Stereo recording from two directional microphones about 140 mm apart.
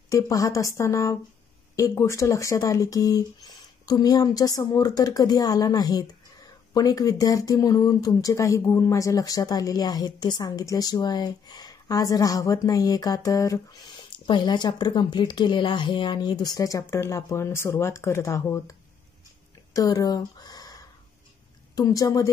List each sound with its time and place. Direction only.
0.1 s speech: 25° left (ahead or behind)